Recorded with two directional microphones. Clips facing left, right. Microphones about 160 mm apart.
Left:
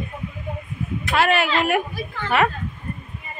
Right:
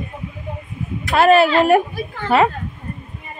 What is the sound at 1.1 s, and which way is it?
A woman's voice, 35° right (ahead or behind).